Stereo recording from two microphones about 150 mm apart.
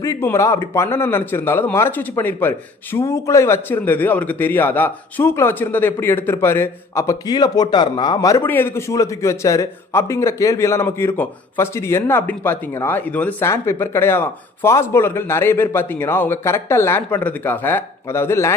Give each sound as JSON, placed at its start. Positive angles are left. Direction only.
{"t": 0.0, "sound": "a man's voice", "side_deg": 20}